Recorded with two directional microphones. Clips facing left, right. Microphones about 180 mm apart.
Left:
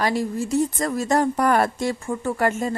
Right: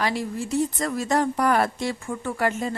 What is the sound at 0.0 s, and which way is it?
Speech, 40° left (ahead or behind).